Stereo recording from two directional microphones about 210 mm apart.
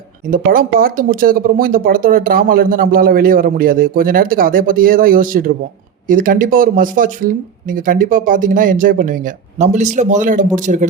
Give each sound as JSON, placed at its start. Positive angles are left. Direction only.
{"t": 0.3, "sound": "speech", "side_deg": -40}